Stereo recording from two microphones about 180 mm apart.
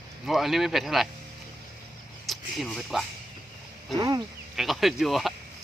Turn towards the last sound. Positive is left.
turn(degrees=0)  # may be behind; listen again after turning